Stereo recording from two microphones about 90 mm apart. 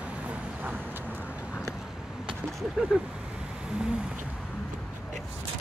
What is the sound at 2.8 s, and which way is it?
Vehicle, 10° right (ahead or behind).